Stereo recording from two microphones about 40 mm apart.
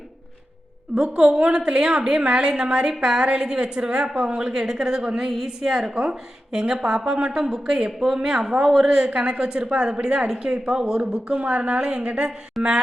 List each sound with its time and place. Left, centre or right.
0.9 s a woman's voice: right
12.6 s speech: centre